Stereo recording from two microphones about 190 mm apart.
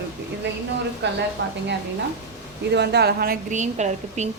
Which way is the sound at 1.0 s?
65° right (ahead or behind).